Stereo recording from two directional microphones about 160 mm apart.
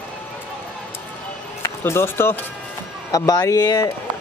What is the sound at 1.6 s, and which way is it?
Speech, 15° left (ahead or behind).